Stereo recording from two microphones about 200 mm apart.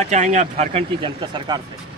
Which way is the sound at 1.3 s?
20° right (ahead or behind).